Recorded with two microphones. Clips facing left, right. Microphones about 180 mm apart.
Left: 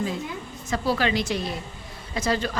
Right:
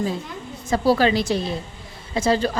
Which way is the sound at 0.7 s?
35° right (ahead or behind).